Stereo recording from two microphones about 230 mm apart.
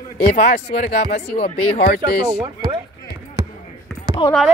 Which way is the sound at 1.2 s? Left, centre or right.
Left.